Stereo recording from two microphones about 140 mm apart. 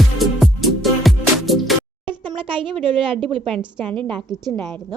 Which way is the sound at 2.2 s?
35° right (ahead or behind).